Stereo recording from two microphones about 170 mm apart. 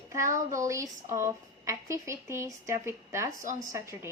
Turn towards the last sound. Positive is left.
turn(degrees=-15)  # may be behind; listen again after turning